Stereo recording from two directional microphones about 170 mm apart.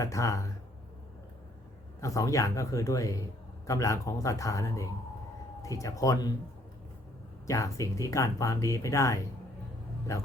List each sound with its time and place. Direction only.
0.0 s speech: 20° left (ahead or behind)
2.0 s a man's voice: 20° left (ahead or behind)
7.4 s a man's voice: 20° left (ahead or behind)